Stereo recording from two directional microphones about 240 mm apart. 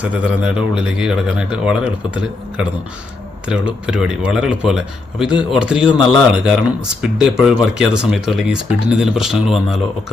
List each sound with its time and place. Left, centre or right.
0.0 s speech: centre